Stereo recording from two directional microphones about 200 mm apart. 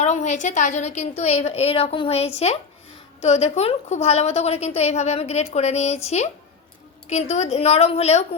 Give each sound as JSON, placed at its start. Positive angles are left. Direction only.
{"t": 0.0, "sound": "a woman's voice", "side_deg": 35}